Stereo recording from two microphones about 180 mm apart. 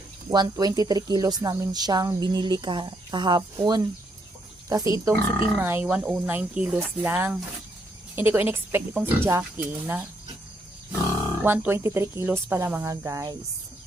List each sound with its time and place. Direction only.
0.3 s speech: 20° right (ahead or behind)
11.4 s speech: 10° right (ahead or behind)